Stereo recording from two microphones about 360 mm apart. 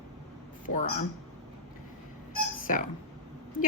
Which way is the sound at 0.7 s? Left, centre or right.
Centre.